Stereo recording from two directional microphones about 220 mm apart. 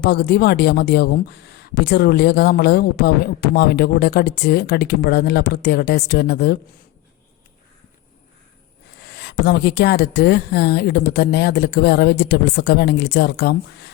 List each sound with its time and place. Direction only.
0.0 s speech: 50° left (ahead or behind)
9.1 s speech: 50° left (ahead or behind)